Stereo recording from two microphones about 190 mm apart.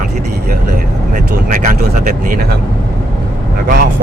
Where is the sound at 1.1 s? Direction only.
45° right (ahead or behind).